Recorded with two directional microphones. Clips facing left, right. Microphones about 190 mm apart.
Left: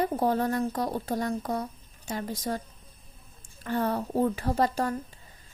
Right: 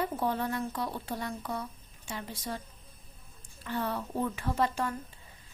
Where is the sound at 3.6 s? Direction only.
45° left (ahead or behind).